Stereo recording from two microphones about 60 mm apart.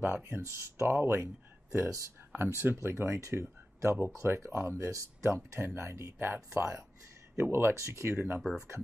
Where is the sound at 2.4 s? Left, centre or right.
Right.